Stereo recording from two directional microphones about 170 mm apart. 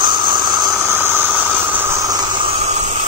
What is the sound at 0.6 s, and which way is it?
Vehicle, 15° right (ahead or behind).